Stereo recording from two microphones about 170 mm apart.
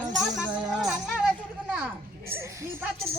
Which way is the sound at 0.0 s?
5° right (ahead or behind).